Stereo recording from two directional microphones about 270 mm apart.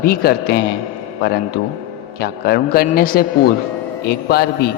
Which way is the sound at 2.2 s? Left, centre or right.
Left.